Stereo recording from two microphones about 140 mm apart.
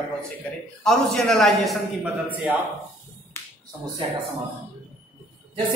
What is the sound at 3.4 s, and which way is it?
Finger snapping, 15° left (ahead or behind).